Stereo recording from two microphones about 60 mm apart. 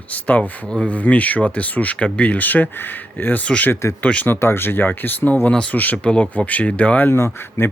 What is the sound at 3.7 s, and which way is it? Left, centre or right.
Speech, left.